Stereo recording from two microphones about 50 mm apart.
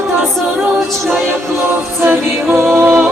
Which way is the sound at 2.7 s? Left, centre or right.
Right.